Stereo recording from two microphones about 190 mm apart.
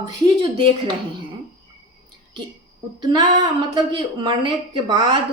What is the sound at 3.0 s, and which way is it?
A woman's voice, 20° right (ahead or behind).